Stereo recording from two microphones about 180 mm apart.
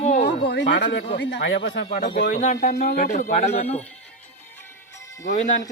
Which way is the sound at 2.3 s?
45° left (ahead or behind).